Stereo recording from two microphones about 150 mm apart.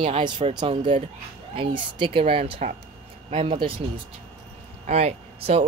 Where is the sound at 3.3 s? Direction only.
55° right (ahead or behind).